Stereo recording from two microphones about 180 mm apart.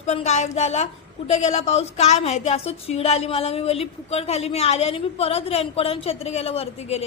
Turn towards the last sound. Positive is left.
turn(degrees=35)  # may be behind; listen again after turning